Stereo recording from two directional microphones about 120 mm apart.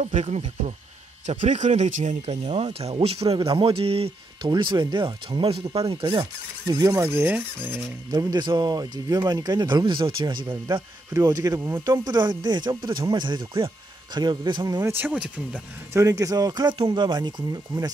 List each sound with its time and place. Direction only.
0.0 s speech: 65° right (ahead or behind)
1.2 s speech: 80° right; by 6.0 s 45° right (ahead or behind)
6.7 s speech: 30° right (ahead or behind)
8.1 s speech: 35° right (ahead or behind)
11.1 s speech: 15° right (ahead or behind)
11.4 s speech: 25° right (ahead or behind)
12.1 s speech: 40° right (ahead or behind)
14.8 s speech: 20° right (ahead or behind)
15.9 s speech: 25° right (ahead or behind)